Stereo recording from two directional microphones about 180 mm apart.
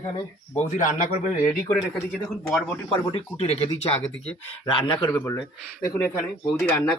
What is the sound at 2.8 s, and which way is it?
Speech, 30° left (ahead or behind).